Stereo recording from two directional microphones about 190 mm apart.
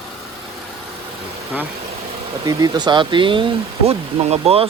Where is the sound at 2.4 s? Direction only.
20° right (ahead or behind).